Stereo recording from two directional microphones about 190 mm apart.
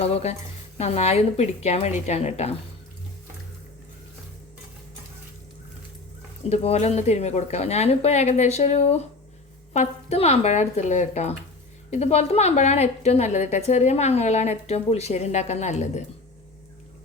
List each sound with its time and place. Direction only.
0.0 s a woman's voice: 35° left (ahead or behind)
6.5 s a woman's voice: 35° left (ahead or behind)